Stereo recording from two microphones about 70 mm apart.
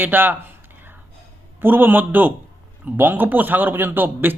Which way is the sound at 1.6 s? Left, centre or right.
Right.